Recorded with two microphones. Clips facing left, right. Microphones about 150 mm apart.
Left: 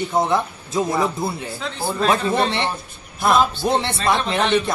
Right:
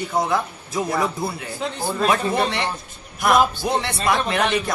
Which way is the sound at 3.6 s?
25° left (ahead or behind).